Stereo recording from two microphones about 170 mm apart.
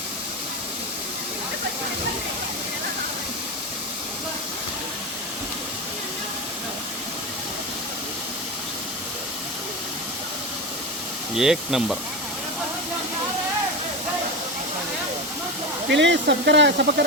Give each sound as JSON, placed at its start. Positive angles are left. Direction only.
{"t": 11.3, "sound": "speech", "side_deg": 0}
{"t": 15.9, "sound": "speech", "side_deg": -90}